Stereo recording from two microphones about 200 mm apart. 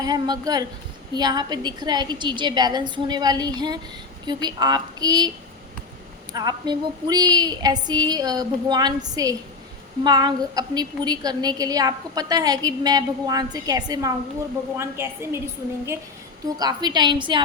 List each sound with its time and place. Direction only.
0.0 s a woman's voice: 20° right (ahead or behind)
6.3 s a woman's voice: 20° right (ahead or behind)
16.6 s a woman's voice: 20° right (ahead or behind)